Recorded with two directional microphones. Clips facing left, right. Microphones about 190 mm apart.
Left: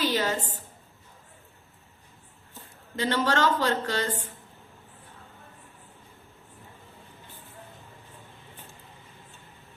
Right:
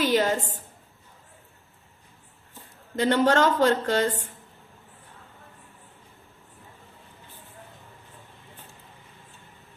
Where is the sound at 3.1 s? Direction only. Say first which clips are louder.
Right 4 dB; 55° right (ahead or behind).